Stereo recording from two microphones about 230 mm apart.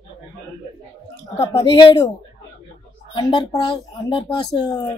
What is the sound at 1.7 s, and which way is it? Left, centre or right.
Speech, left.